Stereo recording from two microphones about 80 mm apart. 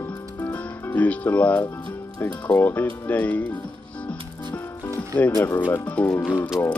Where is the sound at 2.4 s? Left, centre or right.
Left.